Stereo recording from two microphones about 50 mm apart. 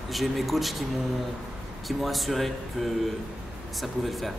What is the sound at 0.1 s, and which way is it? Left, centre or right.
Speech, centre.